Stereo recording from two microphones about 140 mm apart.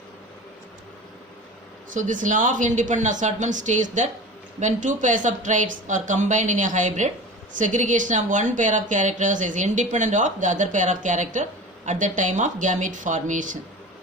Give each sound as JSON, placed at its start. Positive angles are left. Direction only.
{"t": 1.9, "sound": "a woman's voice", "side_deg": -65}